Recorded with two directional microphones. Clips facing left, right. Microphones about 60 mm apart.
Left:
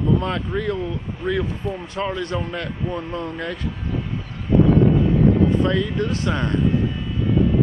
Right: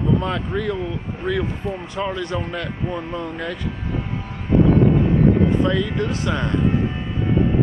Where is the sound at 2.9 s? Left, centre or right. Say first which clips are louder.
Even; centre.